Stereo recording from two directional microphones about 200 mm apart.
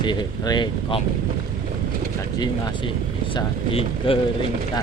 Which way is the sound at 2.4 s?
20° left (ahead or behind).